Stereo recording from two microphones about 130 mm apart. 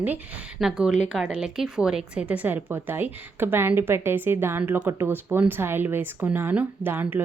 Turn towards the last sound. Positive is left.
turn(degrees=-15)  # may be behind; listen again after turning